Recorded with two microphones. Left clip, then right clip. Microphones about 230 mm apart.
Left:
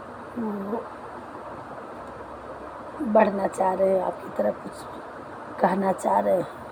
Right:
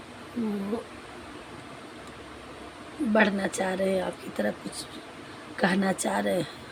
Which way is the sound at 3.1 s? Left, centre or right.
Right.